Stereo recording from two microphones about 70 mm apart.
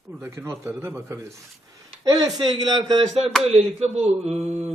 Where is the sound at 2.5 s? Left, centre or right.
Right.